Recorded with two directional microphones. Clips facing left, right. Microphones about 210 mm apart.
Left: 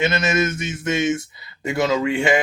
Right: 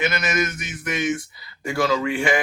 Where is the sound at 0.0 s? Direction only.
25° left (ahead or behind).